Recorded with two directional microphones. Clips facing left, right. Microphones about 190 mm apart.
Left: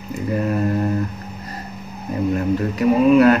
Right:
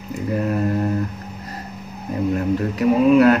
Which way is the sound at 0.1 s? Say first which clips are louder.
Left 1 dB; centre (ahead or behind).